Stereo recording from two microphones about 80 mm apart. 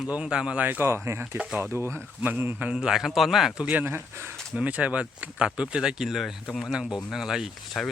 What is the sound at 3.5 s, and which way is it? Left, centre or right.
Speech, centre.